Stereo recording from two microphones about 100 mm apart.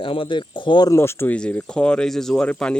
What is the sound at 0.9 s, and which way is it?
Speech, 25° left (ahead or behind).